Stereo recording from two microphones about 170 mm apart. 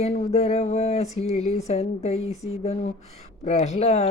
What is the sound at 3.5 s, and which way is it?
Speech, 45° left (ahead or behind).